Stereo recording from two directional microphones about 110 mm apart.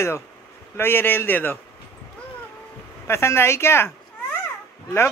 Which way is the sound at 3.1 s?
25° left (ahead or behind).